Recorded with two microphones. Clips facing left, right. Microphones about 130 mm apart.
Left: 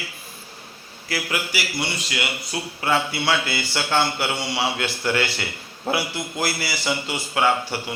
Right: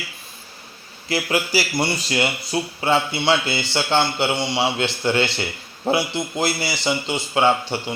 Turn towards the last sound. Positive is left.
turn(degrees=-25)  # may be behind; listen again after turning